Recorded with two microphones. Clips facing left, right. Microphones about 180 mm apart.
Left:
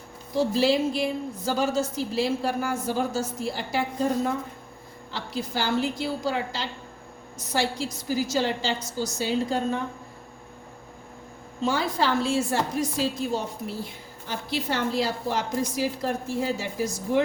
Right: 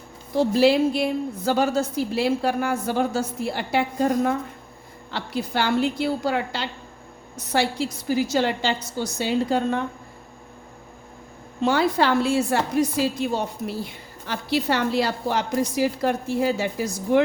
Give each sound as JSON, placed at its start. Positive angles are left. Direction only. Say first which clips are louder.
{"t": 0.3, "sound": "a woman's voice", "louder": "right 4 dB", "side_deg": -65}
{"t": 11.6, "sound": "a woman's voice", "louder": "right 5 dB", "side_deg": -65}